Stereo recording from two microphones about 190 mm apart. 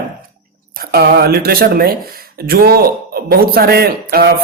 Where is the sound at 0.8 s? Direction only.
55° right (ahead or behind).